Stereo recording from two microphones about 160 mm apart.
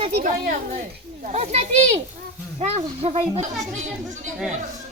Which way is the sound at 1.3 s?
45° right (ahead or behind).